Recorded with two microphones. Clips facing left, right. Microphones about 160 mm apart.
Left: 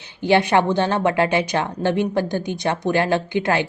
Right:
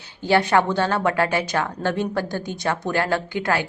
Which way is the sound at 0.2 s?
20° left (ahead or behind).